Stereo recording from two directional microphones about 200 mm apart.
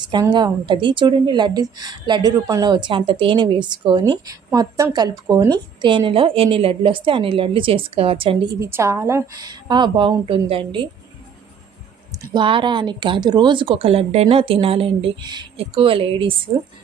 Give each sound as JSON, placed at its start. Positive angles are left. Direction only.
{"t": 0.0, "sound": "a woman's voice", "side_deg": -20}
{"t": 8.5, "sound": "a woman's voice", "side_deg": -15}
{"t": 12.3, "sound": "a woman's voice", "side_deg": -25}